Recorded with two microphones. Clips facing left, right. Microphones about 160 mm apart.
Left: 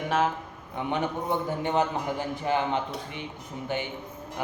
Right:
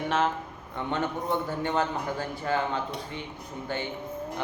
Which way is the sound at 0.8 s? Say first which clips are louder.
Left 1 dB; 15° left (ahead or behind).